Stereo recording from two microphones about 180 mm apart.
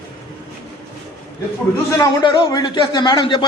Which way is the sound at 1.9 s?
20° left (ahead or behind).